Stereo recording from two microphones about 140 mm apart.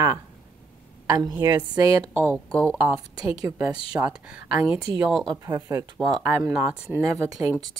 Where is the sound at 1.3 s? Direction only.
25° right (ahead or behind).